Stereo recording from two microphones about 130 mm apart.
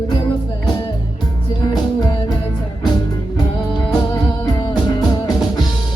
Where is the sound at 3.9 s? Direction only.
30° left (ahead or behind).